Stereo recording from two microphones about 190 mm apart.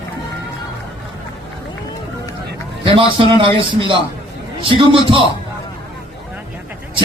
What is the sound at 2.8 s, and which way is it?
A man's voice, 25° right (ahead or behind).